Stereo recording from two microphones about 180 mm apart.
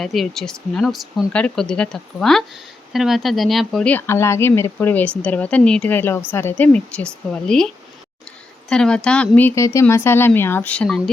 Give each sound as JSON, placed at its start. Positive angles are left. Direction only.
{"t": 0.0, "sound": "speech", "side_deg": 0}
{"t": 8.7, "sound": "speech", "side_deg": 5}